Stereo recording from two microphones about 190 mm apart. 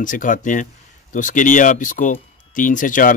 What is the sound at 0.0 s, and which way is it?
Speech, 45° left (ahead or behind).